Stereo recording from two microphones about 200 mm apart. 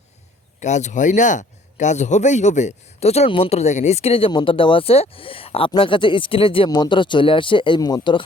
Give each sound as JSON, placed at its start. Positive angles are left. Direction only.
{"t": 0.6, "sound": "speech", "side_deg": 35}